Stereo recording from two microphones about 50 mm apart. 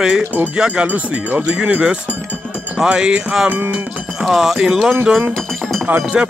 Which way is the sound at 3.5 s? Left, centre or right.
Right.